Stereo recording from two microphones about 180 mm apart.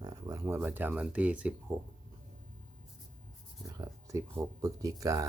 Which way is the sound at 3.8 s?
15° right (ahead or behind).